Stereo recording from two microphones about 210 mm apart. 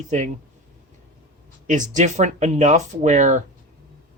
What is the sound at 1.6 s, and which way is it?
Speech, 35° right (ahead or behind).